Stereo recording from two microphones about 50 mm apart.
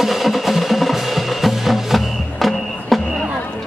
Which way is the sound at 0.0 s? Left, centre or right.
Centre.